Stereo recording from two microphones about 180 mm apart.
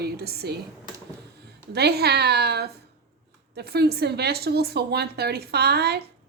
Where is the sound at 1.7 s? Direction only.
60° right (ahead or behind).